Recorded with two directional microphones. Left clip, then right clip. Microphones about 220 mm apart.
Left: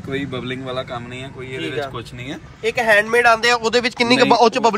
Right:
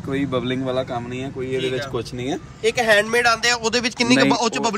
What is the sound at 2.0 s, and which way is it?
Speech, 15° right (ahead or behind).